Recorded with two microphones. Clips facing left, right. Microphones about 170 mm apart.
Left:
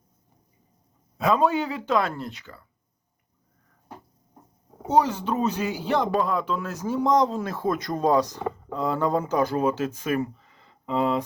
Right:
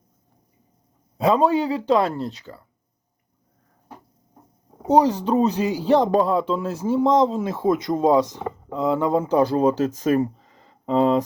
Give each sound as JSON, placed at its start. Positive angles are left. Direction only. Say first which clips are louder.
{"t": 1.2, "sound": "speech", "louder": "right 4 dB", "side_deg": -30}
{"t": 4.9, "sound": "speech", "louder": "right 5 dB", "side_deg": -35}